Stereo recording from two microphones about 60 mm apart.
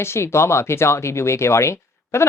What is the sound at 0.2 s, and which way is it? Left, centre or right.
Speech, left.